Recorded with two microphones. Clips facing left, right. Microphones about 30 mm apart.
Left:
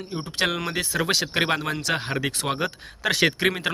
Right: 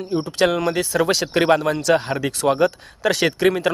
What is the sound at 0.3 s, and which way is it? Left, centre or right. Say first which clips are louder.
Speech: right 5 dB; centre.